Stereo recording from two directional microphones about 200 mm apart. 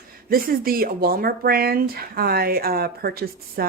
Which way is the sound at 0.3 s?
45° right (ahead or behind).